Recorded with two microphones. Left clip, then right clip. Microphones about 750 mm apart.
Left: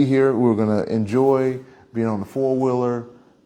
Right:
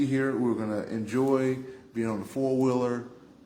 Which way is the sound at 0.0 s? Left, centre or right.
Left.